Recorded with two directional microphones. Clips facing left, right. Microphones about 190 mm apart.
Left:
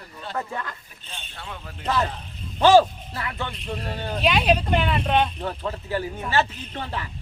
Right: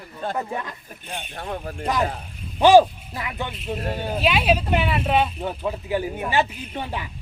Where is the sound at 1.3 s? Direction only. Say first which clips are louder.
Right 8 dB; 50° right (ahead or behind).